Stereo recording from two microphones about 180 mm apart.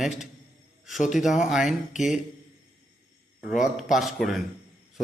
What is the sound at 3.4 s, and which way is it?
Speech, centre (ahead or behind).